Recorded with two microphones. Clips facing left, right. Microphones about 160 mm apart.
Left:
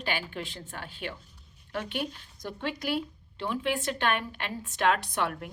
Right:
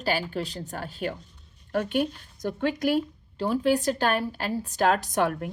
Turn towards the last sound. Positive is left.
turn(degrees=-45)  # may be behind; listen again after turning